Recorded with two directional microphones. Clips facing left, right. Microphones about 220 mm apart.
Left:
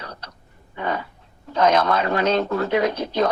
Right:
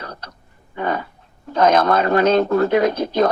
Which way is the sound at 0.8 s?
45° right (ahead or behind).